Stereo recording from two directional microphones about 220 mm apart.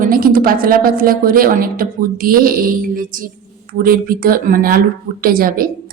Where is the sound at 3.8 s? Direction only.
40° right (ahead or behind).